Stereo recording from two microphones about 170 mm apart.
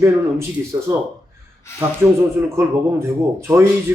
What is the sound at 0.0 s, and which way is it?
Speech, 15° right (ahead or behind).